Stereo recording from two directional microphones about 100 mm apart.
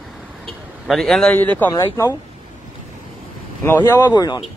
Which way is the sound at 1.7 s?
40° left (ahead or behind).